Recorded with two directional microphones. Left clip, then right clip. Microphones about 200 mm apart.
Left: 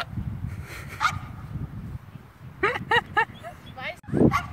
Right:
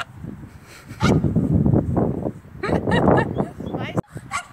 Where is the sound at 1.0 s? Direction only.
45° right (ahead or behind).